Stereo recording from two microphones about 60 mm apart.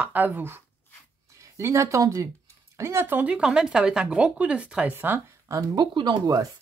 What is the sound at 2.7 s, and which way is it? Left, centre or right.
Speech, right.